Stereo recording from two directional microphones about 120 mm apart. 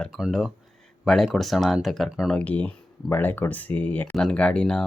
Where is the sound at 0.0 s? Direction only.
Centre (ahead or behind).